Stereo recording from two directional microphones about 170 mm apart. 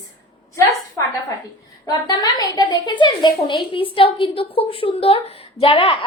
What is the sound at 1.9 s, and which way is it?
A woman's voice, 25° left (ahead or behind).